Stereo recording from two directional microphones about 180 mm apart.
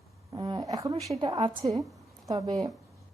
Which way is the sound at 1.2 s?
30° right (ahead or behind).